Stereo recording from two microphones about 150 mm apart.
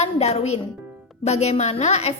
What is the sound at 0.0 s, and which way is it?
Speech, 45° left (ahead or behind).